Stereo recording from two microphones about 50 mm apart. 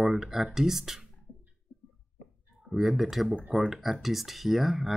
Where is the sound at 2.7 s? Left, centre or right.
Centre.